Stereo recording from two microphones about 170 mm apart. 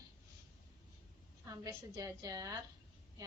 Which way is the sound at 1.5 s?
20° right (ahead or behind).